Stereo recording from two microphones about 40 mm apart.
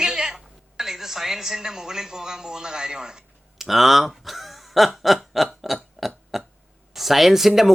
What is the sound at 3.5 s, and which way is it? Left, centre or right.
Speech, centre.